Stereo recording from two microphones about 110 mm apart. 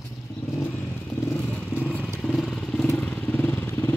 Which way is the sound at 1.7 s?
15° left (ahead or behind).